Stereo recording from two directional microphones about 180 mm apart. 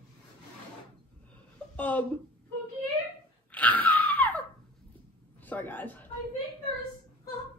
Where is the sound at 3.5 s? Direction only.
10° left (ahead or behind).